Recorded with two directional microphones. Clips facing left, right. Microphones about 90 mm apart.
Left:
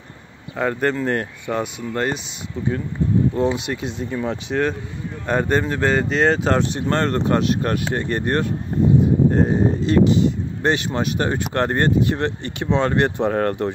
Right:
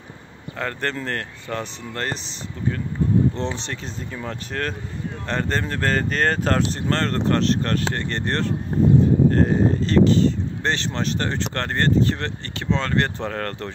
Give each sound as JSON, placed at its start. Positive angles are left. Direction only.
{"t": 0.6, "sound": "speech", "side_deg": 10}
{"t": 3.3, "sound": "speech", "side_deg": 10}